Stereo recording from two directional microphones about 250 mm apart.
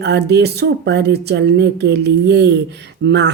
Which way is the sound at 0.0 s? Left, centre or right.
Right.